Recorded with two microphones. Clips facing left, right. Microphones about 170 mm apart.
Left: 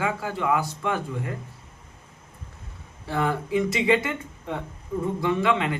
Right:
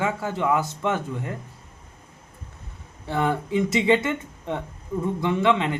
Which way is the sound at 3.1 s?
20° right (ahead or behind).